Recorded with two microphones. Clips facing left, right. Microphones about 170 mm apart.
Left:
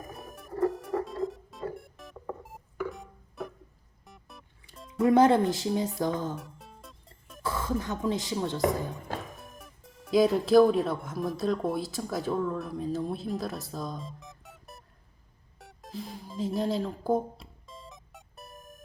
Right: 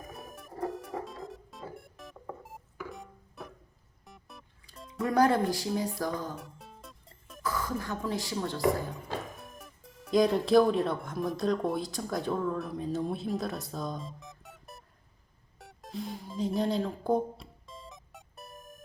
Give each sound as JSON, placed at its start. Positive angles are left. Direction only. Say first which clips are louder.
{"t": 0.0, "sound": "music", "louder": "left 2 dB", "side_deg": 0}
{"t": 5.0, "sound": "speech", "louder": "left 4 dB", "side_deg": 25}
{"t": 6.3, "sound": "music", "louder": "left 3 dB", "side_deg": 0}
{"t": 7.4, "sound": "speech", "louder": "left 2 dB", "side_deg": 25}
{"t": 9.3, "sound": "speech", "louder": "even", "side_deg": 0}
{"t": 15.5, "sound": "music", "louder": "right 1 dB", "side_deg": 0}